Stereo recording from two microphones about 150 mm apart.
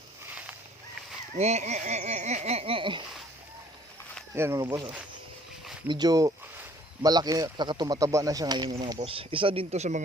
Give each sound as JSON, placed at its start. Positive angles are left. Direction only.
{"t": 1.4, "sound": "speech", "side_deg": -45}
{"t": 4.4, "sound": "speech", "side_deg": -15}
{"t": 5.9, "sound": "speech", "side_deg": -25}